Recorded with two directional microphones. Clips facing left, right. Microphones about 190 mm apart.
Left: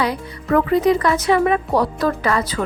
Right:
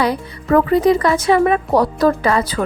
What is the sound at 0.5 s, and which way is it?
Speech, 35° right (ahead or behind).